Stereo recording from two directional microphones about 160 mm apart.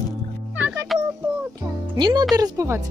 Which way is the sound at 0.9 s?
Centre (ahead or behind).